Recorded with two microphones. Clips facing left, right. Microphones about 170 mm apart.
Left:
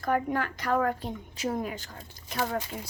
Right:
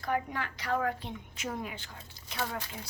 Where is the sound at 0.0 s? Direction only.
50° left (ahead or behind).